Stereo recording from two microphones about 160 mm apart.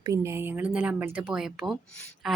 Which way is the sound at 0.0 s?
20° right (ahead or behind).